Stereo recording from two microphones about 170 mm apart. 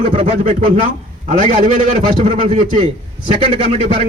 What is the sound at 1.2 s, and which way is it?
A man's voice, 45° right (ahead or behind).